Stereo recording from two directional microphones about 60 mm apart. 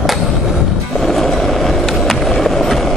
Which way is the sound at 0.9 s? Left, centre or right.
Centre.